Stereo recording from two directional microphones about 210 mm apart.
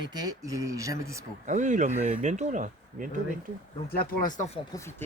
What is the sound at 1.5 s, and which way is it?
Speech, 35° right (ahead or behind).